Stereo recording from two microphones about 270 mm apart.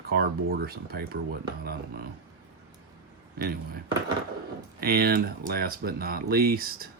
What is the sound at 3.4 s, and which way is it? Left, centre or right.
Speech, right.